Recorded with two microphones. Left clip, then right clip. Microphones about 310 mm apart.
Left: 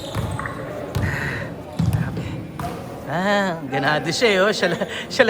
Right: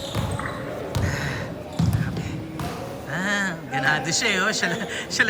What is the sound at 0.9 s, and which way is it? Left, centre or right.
Music, centre.